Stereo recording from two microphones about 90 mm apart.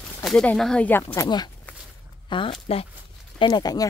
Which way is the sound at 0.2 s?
5° left (ahead or behind).